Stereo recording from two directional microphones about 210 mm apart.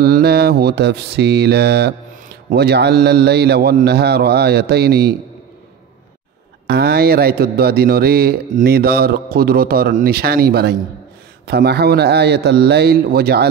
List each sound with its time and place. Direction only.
0.0 s speech: 45° right (ahead or behind)
6.7 s speech: 50° right (ahead or behind)